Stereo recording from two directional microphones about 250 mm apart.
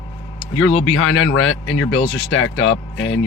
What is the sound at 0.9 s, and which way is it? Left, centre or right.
Speech, left.